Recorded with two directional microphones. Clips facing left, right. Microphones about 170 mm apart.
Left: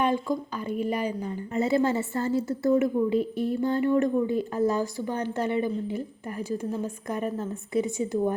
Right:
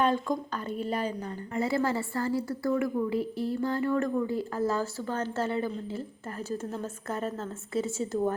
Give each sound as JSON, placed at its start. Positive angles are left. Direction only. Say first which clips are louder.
{"t": 0.0, "sound": "a woman's voice", "louder": "left 1 dB", "side_deg": 10}